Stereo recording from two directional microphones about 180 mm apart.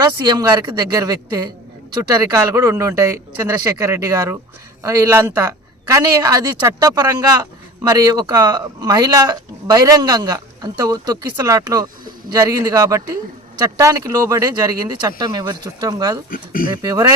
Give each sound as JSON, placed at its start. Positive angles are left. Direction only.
{"t": 0.0, "sound": "a man's voice", "side_deg": -20}
{"t": 16.3, "sound": "speech", "side_deg": 50}
{"t": 16.6, "sound": "a man's voice", "side_deg": -20}